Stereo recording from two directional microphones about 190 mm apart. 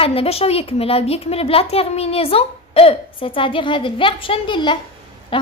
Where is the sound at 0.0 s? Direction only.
30° left (ahead or behind).